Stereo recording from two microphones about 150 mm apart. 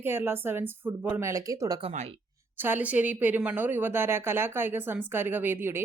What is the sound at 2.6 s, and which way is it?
Speech, 15° right (ahead or behind).